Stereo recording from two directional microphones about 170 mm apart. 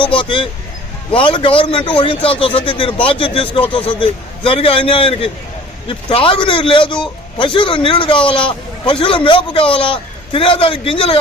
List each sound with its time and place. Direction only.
0.0 s a man's voice: 30° left (ahead or behind)